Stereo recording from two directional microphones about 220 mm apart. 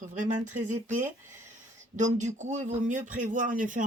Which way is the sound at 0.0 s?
35° right (ahead or behind).